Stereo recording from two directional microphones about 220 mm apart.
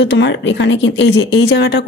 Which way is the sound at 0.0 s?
55° left (ahead or behind).